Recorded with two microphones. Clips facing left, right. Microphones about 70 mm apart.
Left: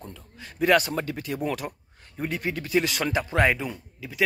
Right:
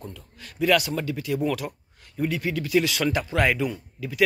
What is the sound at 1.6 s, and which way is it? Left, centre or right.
Speech, centre.